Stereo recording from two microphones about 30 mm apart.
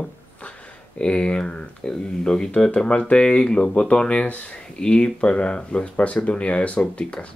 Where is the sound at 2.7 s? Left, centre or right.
Left.